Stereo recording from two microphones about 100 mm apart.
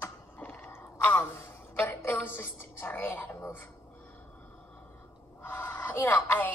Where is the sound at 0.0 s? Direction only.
20° left (ahead or behind).